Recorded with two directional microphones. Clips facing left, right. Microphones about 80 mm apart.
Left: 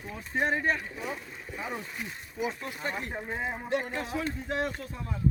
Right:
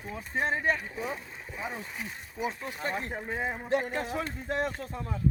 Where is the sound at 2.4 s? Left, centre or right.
Right.